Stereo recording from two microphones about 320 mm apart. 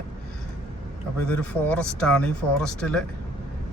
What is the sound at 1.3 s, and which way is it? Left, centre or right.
Speech, centre.